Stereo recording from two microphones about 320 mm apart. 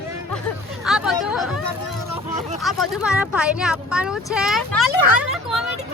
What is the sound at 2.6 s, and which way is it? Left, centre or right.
Speech, centre.